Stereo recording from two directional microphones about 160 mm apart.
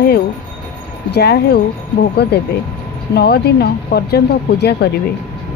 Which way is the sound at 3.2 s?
85° left.